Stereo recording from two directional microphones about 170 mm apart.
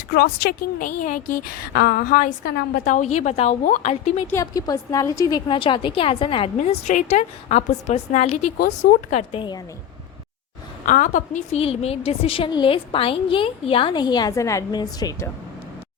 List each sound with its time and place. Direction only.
0.1 s a woman's voice: 65° left (ahead or behind); by 3.6 s 40° left (ahead or behind)
4.3 s a woman's voice: 20° left (ahead or behind); by 8.4 s 40° left (ahead or behind)
8.5 s speech: 55° left (ahead or behind)
9.0 s a woman's voice: 40° left (ahead or behind)
10.8 s a woman's voice: 50° left (ahead or behind); by 15.3 s 20° left (ahead or behind)